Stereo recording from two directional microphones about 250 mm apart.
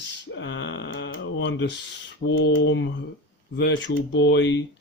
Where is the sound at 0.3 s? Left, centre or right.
Left.